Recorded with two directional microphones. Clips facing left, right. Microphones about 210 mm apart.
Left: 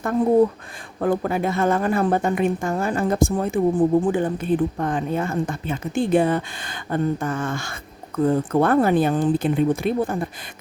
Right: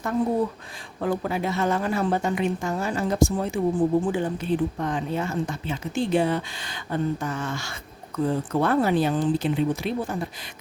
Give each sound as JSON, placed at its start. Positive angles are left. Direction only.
{"t": 0.9, "sound": "a woman's voice", "side_deg": 50}